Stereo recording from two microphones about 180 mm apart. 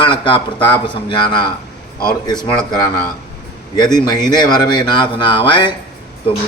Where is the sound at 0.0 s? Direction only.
25° left (ahead or behind).